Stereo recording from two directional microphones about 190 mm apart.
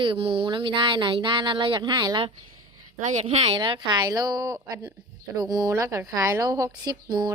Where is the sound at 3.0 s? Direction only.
40° right (ahead or behind); by 7.3 s 20° right (ahead or behind).